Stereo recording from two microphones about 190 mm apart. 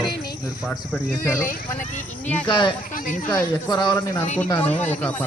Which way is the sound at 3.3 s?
15° left (ahead or behind).